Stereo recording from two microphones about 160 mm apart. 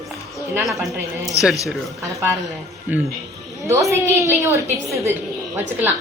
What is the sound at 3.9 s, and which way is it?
A woman's voice, 15° right (ahead or behind).